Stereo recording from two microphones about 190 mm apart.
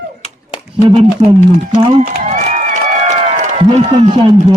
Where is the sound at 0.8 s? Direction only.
30° right (ahead or behind).